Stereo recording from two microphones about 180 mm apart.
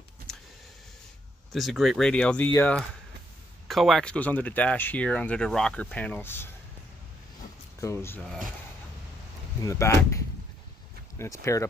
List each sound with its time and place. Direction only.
1.5 s speech: centre (ahead or behind)
7.8 s speech: 15° left (ahead or behind)
9.6 s speech: 15° left (ahead or behind)